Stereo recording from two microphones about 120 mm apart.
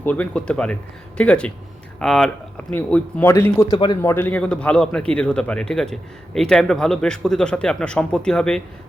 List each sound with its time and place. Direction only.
0.0 s a man's voice: 15° left (ahead or behind)
2.7 s speech: 15° left (ahead or behind)
3.7 s a man's voice: 35° left (ahead or behind)
4.0 s a man's voice: 20° left (ahead or behind)